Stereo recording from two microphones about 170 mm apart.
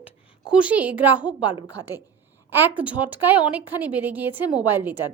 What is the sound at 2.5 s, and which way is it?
A woman's voice, 10° right (ahead or behind).